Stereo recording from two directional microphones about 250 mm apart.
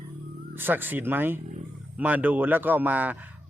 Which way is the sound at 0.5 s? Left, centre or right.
Centre.